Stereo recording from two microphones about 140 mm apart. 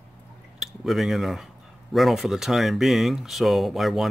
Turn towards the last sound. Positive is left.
turn(degrees=0)  # may be behind; listen again after turning